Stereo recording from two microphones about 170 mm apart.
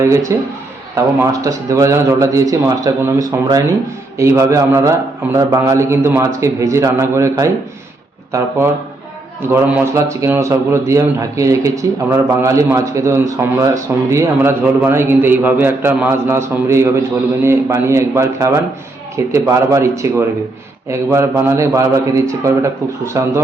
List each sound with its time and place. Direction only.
0.0 s a man's voice: 15° right (ahead or behind)